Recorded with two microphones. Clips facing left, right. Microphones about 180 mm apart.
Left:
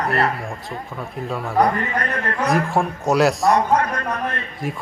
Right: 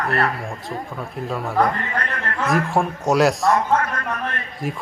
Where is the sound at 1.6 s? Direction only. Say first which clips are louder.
Left 3 dB; 20° left (ahead or behind).